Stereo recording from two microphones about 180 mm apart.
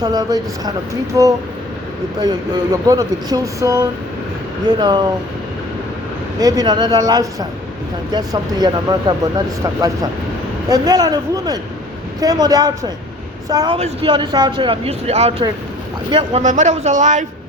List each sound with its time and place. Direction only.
0.0 s speech: 20° right (ahead or behind)
6.4 s speech: 20° right (ahead or behind)
10.7 s speech: 20° right (ahead or behind)
13.7 s speech: 30° right (ahead or behind)